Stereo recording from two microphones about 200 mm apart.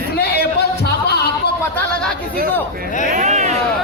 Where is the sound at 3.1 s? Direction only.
35° right (ahead or behind).